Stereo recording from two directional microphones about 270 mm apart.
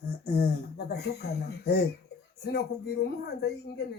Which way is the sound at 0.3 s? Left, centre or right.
Left.